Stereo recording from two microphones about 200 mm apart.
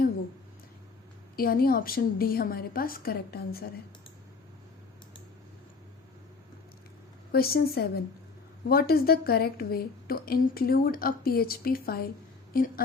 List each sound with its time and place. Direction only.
1.4 s a woman's voice: 50° left (ahead or behind)
7.3 s a woman's voice: 50° left (ahead or behind)